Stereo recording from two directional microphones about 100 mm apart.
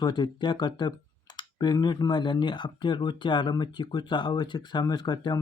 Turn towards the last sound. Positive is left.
turn(degrees=45)  # may be behind; listen again after turning